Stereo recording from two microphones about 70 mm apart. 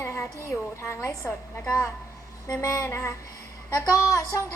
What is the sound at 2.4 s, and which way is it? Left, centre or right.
A woman's voice, left.